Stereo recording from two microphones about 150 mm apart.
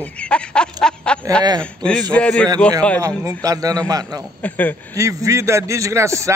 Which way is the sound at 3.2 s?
25° right (ahead or behind).